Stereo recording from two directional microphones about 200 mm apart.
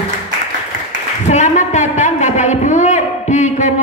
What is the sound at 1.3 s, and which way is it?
A woman's voice, 35° left (ahead or behind).